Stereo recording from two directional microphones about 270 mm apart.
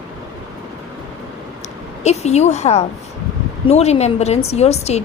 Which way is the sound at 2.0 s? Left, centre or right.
Left.